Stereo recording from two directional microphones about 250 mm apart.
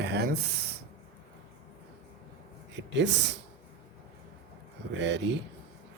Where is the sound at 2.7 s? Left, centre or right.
Right.